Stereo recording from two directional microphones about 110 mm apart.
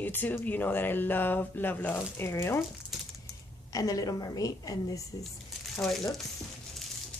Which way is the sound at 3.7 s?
30° left (ahead or behind).